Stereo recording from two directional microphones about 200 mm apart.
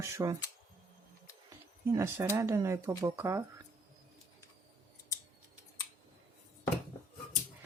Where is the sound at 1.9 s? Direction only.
15° right (ahead or behind).